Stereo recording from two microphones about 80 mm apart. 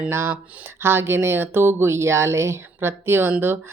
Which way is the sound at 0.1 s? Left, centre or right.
Right.